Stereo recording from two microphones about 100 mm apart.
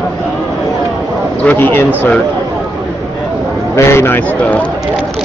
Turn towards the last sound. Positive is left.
turn(degrees=25)  # may be behind; listen again after turning